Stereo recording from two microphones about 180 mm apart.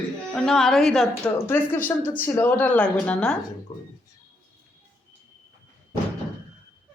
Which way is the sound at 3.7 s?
25° left (ahead or behind).